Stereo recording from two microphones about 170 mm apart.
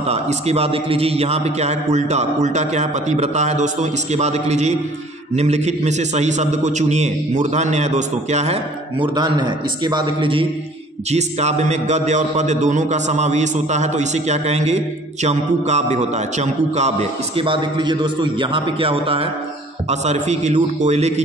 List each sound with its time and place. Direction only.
0.0 s a man's voice: 40° right (ahead or behind)
9.0 s a man's voice: 25° right (ahead or behind)
11.1 s a man's voice: 40° right (ahead or behind)